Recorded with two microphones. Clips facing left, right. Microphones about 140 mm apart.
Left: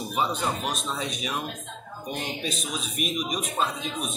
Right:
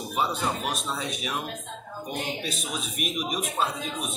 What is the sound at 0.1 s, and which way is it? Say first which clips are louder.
A man's voice: even; 5° right (ahead or behind).